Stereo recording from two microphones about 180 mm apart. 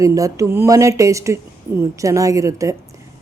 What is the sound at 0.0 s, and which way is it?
A woman's voice, 20° right (ahead or behind).